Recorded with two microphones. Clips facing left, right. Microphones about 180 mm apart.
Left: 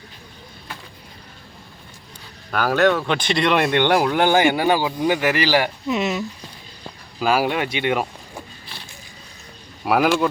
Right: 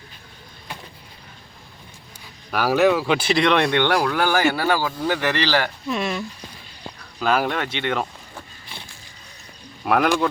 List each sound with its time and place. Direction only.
2.5 s speech: 5° right (ahead or behind)
3.8 s speech: 15° left (ahead or behind)
7.2 s speech: 10° left (ahead or behind)
9.8 s speech: 5° left (ahead or behind)